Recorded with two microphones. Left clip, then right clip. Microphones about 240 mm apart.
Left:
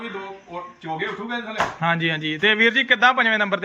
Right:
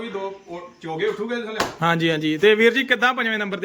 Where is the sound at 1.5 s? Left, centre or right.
Right.